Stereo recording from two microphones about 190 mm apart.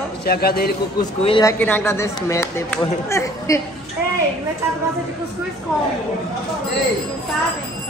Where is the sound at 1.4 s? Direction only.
10° left (ahead or behind).